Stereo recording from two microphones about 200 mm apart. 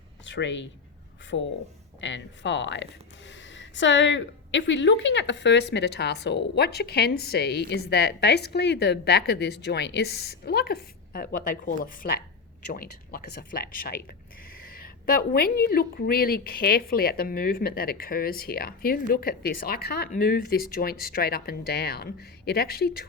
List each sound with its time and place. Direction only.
0.3 s a woman's voice: 65° left (ahead or behind)